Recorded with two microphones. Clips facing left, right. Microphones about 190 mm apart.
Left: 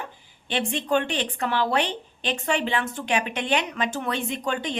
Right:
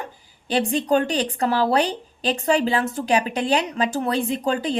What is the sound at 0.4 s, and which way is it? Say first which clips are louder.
A woman's voice: right 6 dB; 35° right (ahead or behind).